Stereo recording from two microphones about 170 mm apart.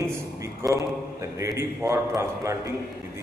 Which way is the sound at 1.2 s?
15° right (ahead or behind).